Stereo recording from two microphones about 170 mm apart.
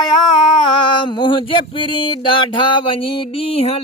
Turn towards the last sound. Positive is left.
turn(degrees=35)  # may be behind; listen again after turning